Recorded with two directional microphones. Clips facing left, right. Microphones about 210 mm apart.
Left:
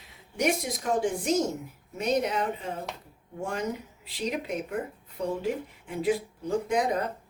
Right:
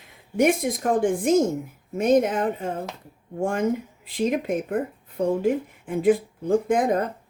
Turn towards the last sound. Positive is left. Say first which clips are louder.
# right 6 dB
turn(degrees=-50)  # may be behind; listen again after turning